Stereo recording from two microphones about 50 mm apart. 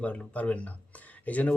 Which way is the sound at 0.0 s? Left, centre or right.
Left.